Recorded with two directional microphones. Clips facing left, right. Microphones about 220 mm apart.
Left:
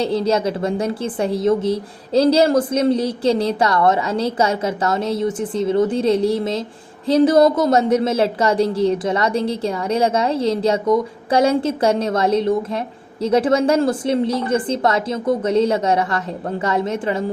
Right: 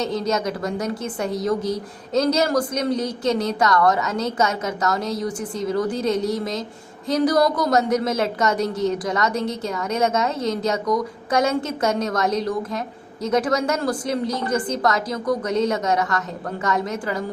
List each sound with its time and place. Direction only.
0.0 s a woman's voice: 30° left (ahead or behind)